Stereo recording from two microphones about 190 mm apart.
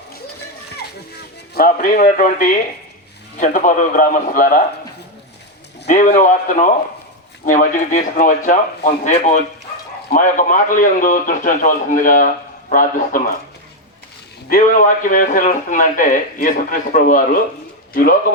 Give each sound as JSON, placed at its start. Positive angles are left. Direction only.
{"t": 1.5, "sound": "a man's voice", "side_deg": 45}
{"t": 5.9, "sound": "a man's voice", "side_deg": 40}
{"t": 14.5, "sound": "a man's voice", "side_deg": 45}